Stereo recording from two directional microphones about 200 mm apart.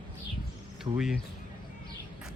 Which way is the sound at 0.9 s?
30° right (ahead or behind).